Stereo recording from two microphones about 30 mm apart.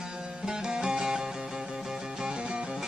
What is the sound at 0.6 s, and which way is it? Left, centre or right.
Music, right.